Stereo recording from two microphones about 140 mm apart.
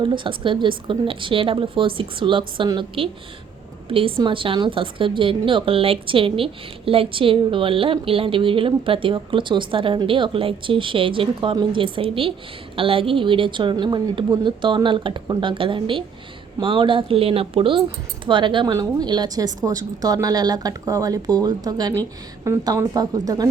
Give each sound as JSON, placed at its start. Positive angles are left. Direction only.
{"t": 0.0, "sound": "a woman's voice", "side_deg": -35}